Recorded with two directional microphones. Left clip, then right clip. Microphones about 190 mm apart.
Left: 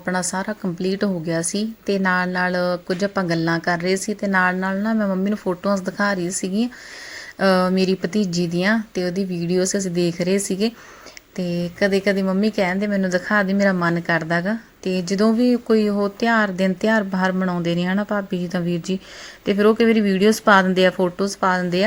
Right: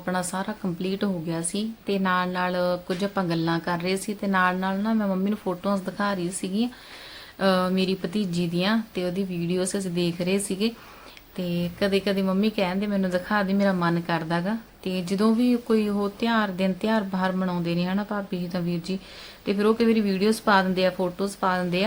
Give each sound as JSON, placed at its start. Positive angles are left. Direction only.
{"t": 0.0, "sound": "a woman's voice", "side_deg": 25}
{"t": 7.3, "sound": "a woman's voice", "side_deg": 30}